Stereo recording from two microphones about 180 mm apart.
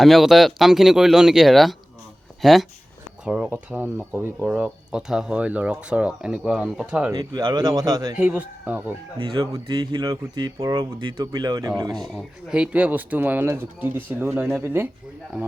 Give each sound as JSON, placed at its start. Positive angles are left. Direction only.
{"t": 0.0, "sound": "speech", "side_deg": 0}
{"t": 7.1, "sound": "speech", "side_deg": -20}
{"t": 8.1, "sound": "speech", "side_deg": -10}
{"t": 9.2, "sound": "speech", "side_deg": -25}
{"t": 11.9, "sound": "speech", "side_deg": 0}